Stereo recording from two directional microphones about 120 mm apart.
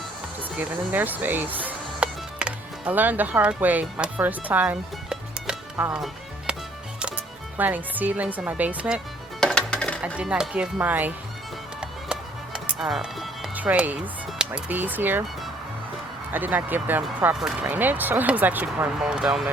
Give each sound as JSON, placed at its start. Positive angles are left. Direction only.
{"t": 0.5, "sound": "speech", "side_deg": -15}
{"t": 6.5, "sound": "music", "side_deg": -10}
{"t": 7.5, "sound": "speech", "side_deg": -15}
{"t": 9.4, "sound": "music", "side_deg": 5}
{"t": 10.2, "sound": "speech", "side_deg": -5}
{"t": 12.5, "sound": "speech", "side_deg": -5}
{"t": 13.6, "sound": "speech", "side_deg": -15}
{"t": 16.3, "sound": "speech", "side_deg": -15}